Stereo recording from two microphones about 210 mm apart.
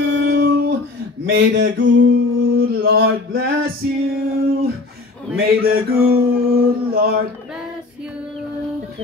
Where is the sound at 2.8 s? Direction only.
45° right (ahead or behind).